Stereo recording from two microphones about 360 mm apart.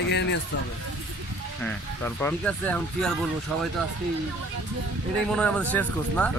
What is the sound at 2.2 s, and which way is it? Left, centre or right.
Speech, centre.